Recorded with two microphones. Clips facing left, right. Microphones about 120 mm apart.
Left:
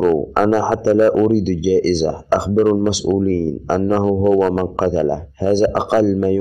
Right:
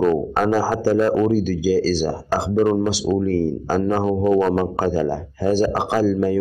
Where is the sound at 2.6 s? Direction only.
15° left (ahead or behind).